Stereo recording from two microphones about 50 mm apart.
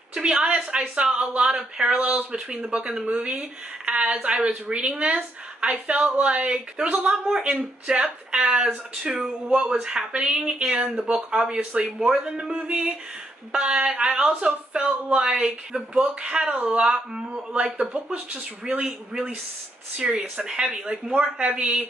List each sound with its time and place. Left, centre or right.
0.1 s speech: centre
15.7 s speech: centre